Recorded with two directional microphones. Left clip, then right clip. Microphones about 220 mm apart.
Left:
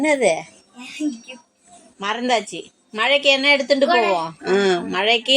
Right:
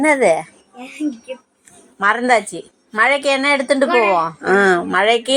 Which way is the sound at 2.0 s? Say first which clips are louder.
Right 6 dB; 15° right (ahead or behind).